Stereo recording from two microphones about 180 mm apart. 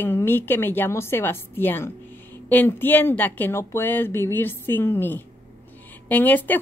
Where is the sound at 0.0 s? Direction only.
10° left (ahead or behind).